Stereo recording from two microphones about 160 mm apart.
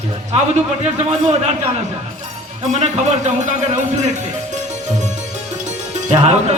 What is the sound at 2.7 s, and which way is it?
Speech, 45° right (ahead or behind).